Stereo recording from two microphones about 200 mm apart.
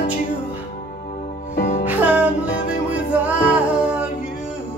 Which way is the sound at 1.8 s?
10° right (ahead or behind).